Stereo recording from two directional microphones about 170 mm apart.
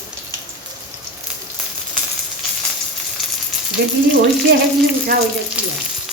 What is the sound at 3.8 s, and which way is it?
Speech, 70° right (ahead or behind).